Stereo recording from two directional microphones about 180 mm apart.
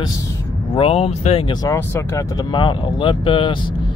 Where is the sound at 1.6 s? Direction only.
15° left (ahead or behind).